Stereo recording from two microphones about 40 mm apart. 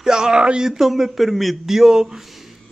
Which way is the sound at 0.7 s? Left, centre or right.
Centre.